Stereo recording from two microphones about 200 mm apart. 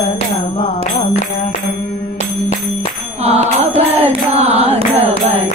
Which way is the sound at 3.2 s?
30° right (ahead or behind).